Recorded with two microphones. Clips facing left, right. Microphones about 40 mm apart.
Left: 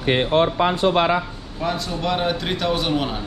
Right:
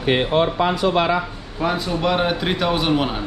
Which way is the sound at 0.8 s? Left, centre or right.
Left.